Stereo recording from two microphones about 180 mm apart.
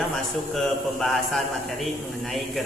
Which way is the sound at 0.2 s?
Centre (ahead or behind).